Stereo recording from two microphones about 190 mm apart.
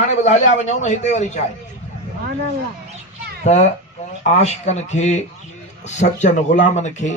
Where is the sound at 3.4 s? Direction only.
35° left (ahead or behind).